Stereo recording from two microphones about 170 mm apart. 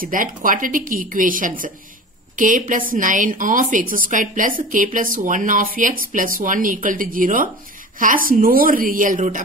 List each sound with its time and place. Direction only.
0.0 s a woman's voice: 50° right (ahead or behind)